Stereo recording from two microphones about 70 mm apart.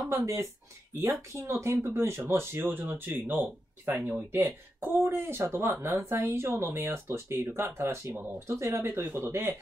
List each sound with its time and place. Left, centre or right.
0.2 s a woman's voice: right